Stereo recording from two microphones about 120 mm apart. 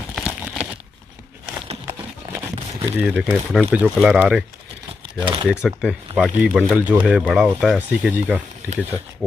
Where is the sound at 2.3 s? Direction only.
20° right (ahead or behind).